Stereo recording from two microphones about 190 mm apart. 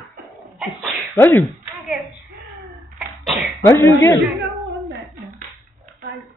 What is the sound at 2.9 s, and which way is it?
Cough, centre (ahead or behind).